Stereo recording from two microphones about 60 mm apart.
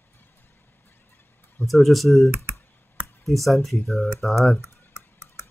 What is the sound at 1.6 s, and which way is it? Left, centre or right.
Speech, centre.